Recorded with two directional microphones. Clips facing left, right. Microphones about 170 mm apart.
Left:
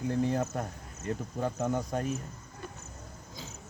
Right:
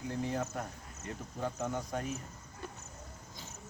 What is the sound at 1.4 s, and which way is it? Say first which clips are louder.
Speech: left 4 dB; 45° left (ahead or behind).